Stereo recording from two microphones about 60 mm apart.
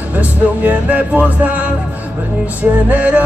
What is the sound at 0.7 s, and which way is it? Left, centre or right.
Music, right.